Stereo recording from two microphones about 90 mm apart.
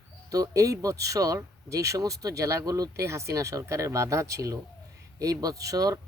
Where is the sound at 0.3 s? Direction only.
40° right (ahead or behind).